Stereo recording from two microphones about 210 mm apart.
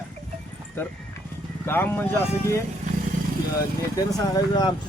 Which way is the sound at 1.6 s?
10° left (ahead or behind).